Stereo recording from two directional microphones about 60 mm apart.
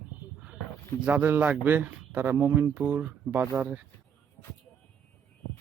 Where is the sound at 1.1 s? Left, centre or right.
Right.